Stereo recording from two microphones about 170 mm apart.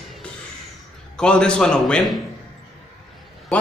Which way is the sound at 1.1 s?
5° left (ahead or behind).